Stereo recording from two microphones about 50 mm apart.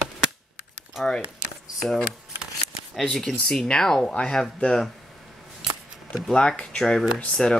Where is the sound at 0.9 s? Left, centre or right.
Centre.